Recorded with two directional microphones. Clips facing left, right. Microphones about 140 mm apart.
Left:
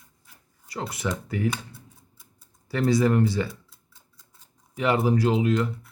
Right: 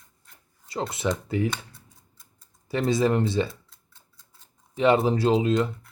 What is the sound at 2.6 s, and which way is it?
Speech, 20° right (ahead or behind).